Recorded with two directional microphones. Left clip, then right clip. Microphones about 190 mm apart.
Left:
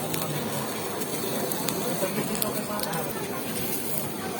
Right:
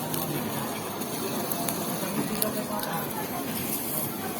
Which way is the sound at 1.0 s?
45° left (ahead or behind).